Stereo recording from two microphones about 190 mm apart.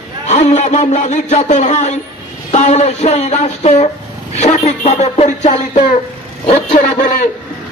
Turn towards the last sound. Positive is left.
turn(degrees=40)  # may be behind; listen again after turning